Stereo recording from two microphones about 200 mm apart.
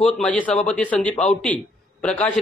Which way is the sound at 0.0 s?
5° left (ahead or behind).